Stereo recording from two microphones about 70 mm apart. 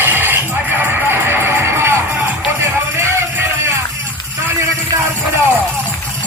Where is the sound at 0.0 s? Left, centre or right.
Right.